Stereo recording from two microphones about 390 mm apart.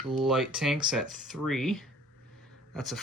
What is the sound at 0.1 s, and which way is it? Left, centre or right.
Speech, centre.